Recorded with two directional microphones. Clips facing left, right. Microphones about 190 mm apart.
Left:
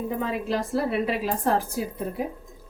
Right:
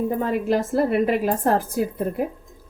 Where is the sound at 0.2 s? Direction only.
50° right (ahead or behind).